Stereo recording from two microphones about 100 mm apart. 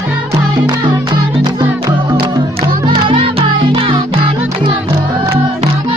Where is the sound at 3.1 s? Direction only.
60° right (ahead or behind).